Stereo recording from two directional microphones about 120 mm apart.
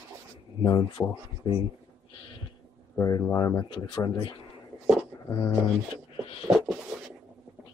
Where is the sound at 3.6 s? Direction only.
40° left (ahead or behind).